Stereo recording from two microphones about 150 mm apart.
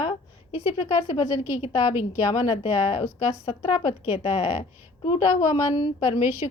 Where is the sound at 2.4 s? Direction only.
35° left (ahead or behind).